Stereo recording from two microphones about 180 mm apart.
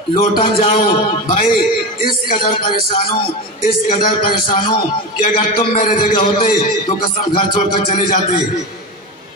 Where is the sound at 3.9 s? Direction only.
30° left (ahead or behind).